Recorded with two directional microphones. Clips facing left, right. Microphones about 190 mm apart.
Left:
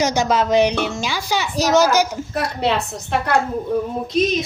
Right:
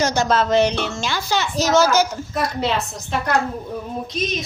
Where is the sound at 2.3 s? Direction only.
60° left (ahead or behind).